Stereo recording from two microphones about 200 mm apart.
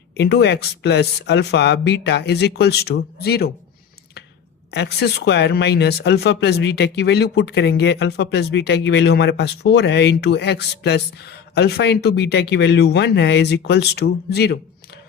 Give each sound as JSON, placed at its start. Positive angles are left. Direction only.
{"t": 0.2, "sound": "speech", "side_deg": 55}
{"t": 4.7, "sound": "speech", "side_deg": 55}